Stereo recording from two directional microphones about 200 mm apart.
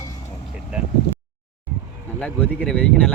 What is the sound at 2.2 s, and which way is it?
Speech, 5° left (ahead or behind).